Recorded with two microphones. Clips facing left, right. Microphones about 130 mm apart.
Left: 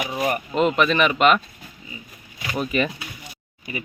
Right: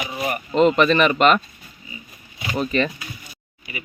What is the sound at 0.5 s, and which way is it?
Speech, 5° left (ahead or behind).